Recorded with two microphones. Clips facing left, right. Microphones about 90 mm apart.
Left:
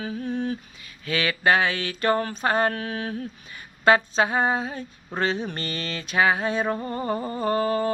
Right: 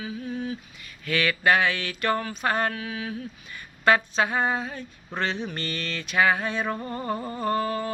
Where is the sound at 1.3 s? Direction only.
25° left (ahead or behind).